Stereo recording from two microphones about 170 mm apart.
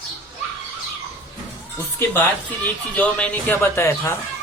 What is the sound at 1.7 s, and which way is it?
Speech, 15° left (ahead or behind).